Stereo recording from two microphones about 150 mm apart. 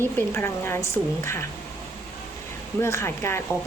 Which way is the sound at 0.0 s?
15° left (ahead or behind).